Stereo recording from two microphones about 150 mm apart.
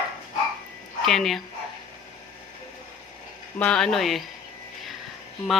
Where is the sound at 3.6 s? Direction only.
5° left (ahead or behind).